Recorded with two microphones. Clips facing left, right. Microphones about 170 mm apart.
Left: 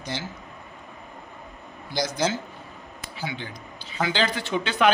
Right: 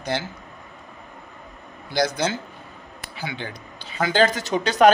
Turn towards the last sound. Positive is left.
turn(degrees=-40)  # may be behind; listen again after turning